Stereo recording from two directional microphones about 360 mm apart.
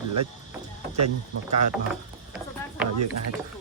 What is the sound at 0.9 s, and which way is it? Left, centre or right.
Speech, right.